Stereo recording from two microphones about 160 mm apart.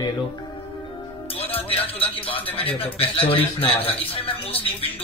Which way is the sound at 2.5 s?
35° left (ahead or behind).